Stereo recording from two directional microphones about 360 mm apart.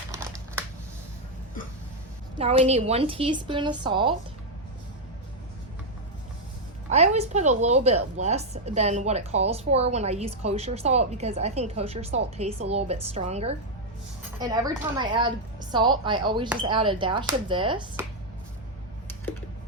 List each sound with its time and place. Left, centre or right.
0.1 s crumpling: centre
2.4 s a woman's voice: centre
6.9 s a woman's voice: centre